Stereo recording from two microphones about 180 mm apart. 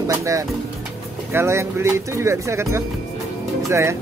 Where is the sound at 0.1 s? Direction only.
15° right (ahead or behind).